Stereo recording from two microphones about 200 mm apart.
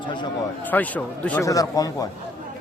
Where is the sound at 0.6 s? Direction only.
10° left (ahead or behind).